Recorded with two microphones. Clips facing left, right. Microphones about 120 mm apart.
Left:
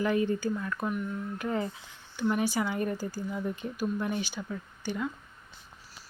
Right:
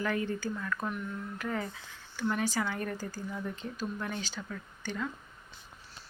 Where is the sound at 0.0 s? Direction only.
20° left (ahead or behind).